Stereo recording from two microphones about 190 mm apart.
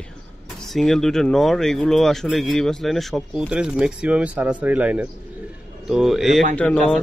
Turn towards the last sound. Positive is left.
turn(degrees=5)  # may be behind; listen again after turning